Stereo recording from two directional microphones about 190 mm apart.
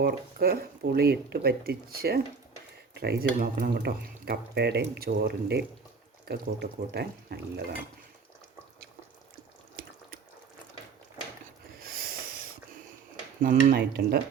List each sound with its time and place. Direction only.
0.0 s speech: 50° right (ahead or behind)
11.8 s a sound: 50° right (ahead or behind)
13.4 s speech: 45° right (ahead or behind)